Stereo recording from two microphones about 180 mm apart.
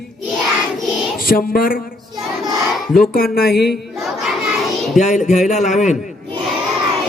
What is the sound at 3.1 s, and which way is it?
Speech, 55° left (ahead or behind).